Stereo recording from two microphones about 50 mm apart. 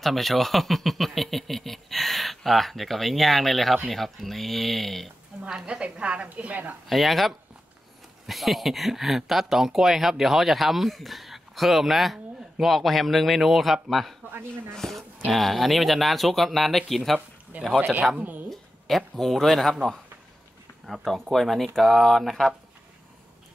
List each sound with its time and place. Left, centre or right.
0.0 s speech: centre
5.7 s a woman's voice: right
6.9 s speech: centre
17.5 s speech: right
18.5 s speech: centre
20.8 s speech: centre